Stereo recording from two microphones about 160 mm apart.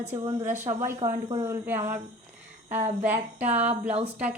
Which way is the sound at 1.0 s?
45° right (ahead or behind).